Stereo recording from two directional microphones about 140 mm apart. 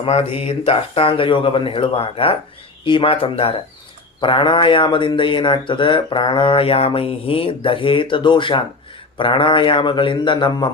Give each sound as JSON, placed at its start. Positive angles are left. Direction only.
{"t": 0.0, "sound": "speech", "side_deg": 40}